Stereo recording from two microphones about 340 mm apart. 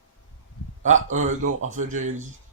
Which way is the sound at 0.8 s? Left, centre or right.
Right.